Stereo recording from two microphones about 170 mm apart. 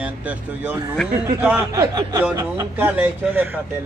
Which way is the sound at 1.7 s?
20° right (ahead or behind).